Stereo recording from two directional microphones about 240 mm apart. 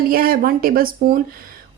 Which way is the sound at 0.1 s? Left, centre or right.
Right.